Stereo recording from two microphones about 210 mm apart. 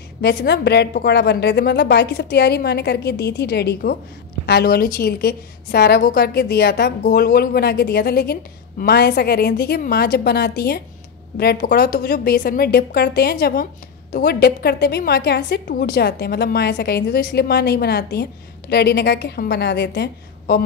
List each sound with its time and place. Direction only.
0.2 s a woman's voice: 50° left (ahead or behind)